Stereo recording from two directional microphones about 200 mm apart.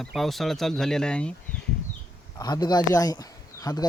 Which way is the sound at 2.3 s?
20° left (ahead or behind).